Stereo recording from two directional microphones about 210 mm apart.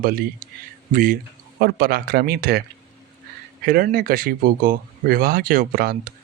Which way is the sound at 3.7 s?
45° right (ahead or behind).